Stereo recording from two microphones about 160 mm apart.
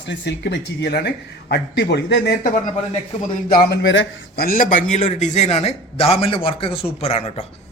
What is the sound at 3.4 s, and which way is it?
Speech, 80° left.